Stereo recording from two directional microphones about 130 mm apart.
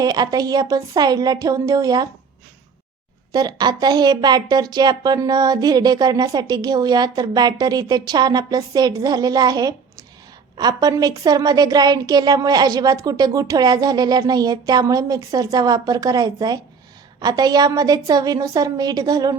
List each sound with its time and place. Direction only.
0.0 s a woman's voice: 30° right (ahead or behind)
3.3 s a woman's voice: 30° right (ahead or behind)